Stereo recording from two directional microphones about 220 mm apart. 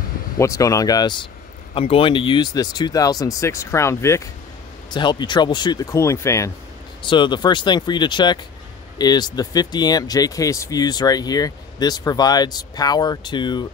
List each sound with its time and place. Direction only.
0.4 s speech: 15° left (ahead or behind)